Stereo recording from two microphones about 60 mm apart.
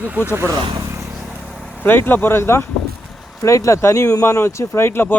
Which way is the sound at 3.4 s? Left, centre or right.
Left.